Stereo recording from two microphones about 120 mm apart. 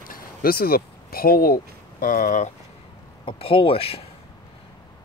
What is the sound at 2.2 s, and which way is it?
Speech, 90° left.